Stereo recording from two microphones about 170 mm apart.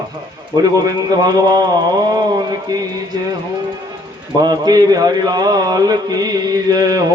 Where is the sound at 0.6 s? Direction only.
20° right (ahead or behind).